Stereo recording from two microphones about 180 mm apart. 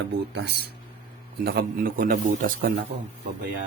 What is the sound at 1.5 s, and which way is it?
Speech, 55° right (ahead or behind).